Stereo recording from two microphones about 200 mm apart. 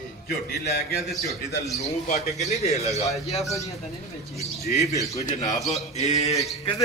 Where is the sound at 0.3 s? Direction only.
50° left (ahead or behind).